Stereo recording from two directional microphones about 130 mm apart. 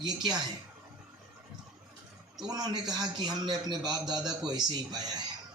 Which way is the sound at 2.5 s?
30° right (ahead or behind).